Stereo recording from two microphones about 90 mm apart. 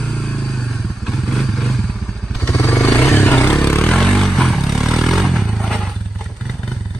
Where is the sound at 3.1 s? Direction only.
15° left (ahead or behind).